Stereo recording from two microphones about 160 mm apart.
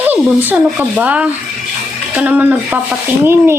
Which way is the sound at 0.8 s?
10° right (ahead or behind).